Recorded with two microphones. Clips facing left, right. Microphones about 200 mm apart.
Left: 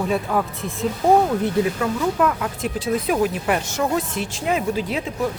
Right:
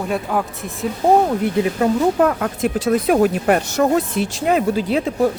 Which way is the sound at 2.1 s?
45° right (ahead or behind).